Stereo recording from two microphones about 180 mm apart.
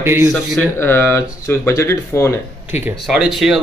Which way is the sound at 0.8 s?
10° left (ahead or behind).